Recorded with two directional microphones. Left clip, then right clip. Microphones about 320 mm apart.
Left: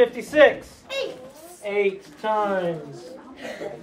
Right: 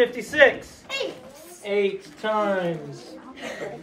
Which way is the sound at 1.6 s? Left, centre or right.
Centre.